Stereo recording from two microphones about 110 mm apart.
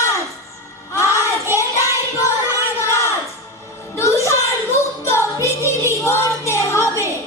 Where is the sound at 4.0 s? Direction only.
25° left (ahead or behind).